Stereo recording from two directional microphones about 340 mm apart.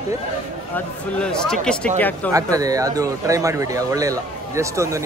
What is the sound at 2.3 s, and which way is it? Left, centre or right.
Speech, centre.